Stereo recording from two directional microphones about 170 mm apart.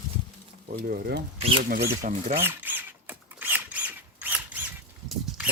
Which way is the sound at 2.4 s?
10° right (ahead or behind).